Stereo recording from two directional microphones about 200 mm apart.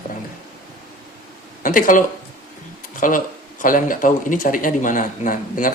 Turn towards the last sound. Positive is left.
turn(degrees=40)  # may be behind; listen again after turning